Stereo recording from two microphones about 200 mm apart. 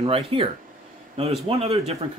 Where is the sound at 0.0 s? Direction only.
25° right (ahead or behind).